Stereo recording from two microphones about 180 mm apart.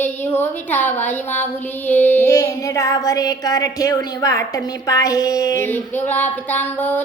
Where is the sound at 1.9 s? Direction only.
10° left (ahead or behind).